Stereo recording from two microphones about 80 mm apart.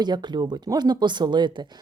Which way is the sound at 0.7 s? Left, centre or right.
Right.